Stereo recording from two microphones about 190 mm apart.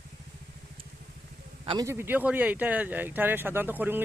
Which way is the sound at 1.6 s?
20° right (ahead or behind).